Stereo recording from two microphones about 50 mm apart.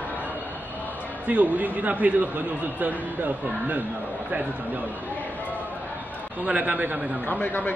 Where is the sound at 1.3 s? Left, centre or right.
Right.